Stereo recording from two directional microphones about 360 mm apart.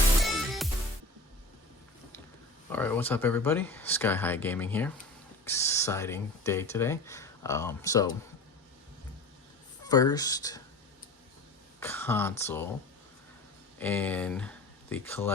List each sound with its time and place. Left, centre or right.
0.2 s music: centre
2.7 s speech: centre
9.8 s speech: centre
11.8 s speech: centre
13.7 s speech: centre